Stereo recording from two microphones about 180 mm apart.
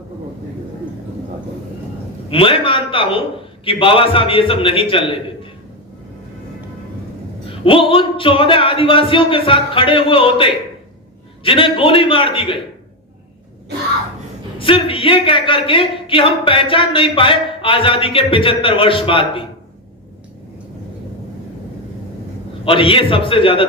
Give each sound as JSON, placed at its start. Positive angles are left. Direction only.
{"t": 2.3, "sound": "speech", "side_deg": 30}
{"t": 7.6, "sound": "speech", "side_deg": 30}
{"t": 14.6, "sound": "speech", "side_deg": 30}
{"t": 22.6, "sound": "speech", "side_deg": 30}